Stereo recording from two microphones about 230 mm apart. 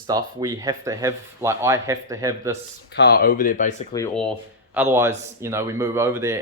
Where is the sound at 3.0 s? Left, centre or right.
Left.